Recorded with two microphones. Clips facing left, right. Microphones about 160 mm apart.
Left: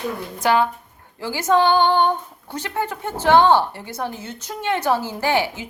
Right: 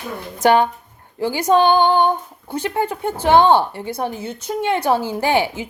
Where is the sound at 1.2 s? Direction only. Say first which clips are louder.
Right 3 dB; 20° right (ahead or behind).